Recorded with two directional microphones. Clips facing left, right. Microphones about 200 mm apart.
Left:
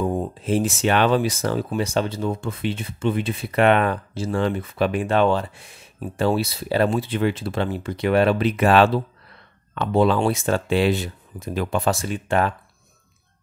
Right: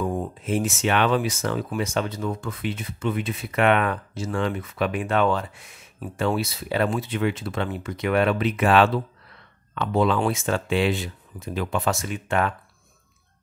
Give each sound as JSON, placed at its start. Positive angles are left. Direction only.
{"t": 0.0, "sound": "speech", "side_deg": 25}